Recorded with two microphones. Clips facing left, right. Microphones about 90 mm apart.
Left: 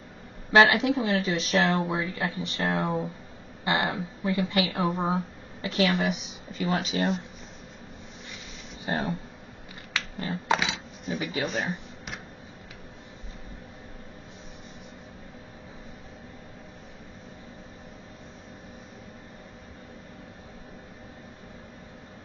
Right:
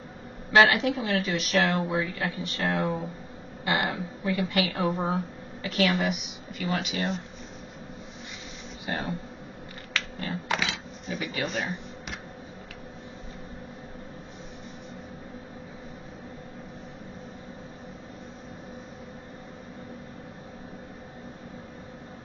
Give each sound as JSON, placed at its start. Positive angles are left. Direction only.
{"t": 0.5, "sound": "speech", "side_deg": 20}
{"t": 8.8, "sound": "speech", "side_deg": 30}
{"t": 10.1, "sound": "typewriter", "side_deg": 25}
{"t": 11.4, "sound": "a sound", "side_deg": 0}